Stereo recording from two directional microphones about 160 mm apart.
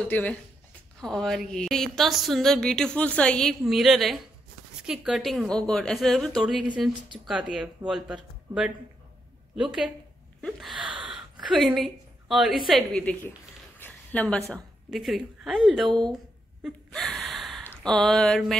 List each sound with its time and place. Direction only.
0.1 s a woman's voice: 10° left (ahead or behind)
10.8 s gasp: 30° right (ahead or behind)
11.5 s a woman's voice: centre (ahead or behind)
13.7 s a sound: 10° left (ahead or behind)
14.5 s a woman's voice: centre (ahead or behind)
16.6 s gasp: centre (ahead or behind)